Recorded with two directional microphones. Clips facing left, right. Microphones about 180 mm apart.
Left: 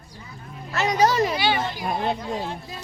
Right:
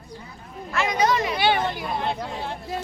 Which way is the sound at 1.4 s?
55° right (ahead or behind).